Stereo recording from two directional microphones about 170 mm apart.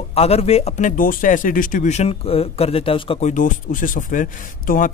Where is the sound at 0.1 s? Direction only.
35° left (ahead or behind).